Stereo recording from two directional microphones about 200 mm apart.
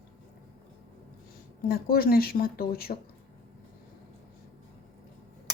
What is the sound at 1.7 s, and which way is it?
Speech, 50° left (ahead or behind).